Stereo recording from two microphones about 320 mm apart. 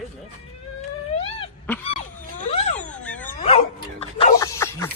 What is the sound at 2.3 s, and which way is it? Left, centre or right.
Vehicle, left.